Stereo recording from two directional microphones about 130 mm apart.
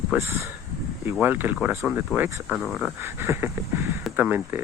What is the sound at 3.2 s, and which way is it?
Speech, 20° right (ahead or behind).